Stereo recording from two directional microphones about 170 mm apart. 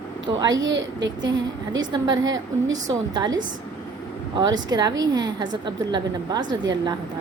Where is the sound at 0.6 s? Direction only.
90° right.